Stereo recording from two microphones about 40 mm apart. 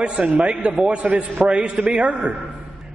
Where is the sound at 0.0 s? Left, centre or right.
Right.